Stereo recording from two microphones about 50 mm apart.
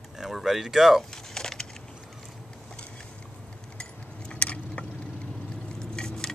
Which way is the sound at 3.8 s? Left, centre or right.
Left.